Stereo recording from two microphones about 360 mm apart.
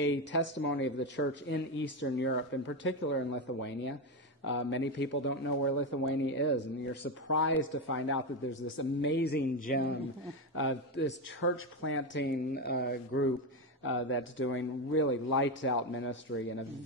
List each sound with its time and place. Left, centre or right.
0.0 s a man's voice: left